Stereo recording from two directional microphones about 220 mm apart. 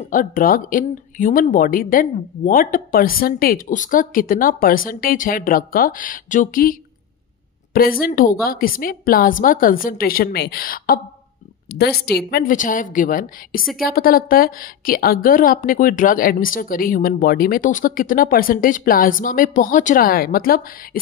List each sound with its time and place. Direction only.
0.0 s a woman's voice: 40° left (ahead or behind)
12.0 s a woman's voice: 45° left (ahead or behind)